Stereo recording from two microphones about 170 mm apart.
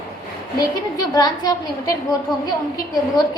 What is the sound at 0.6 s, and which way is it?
A woman's voice, 20° left (ahead or behind).